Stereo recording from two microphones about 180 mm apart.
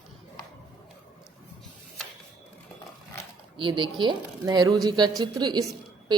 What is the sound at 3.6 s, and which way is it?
A woman's voice, 25° right (ahead or behind).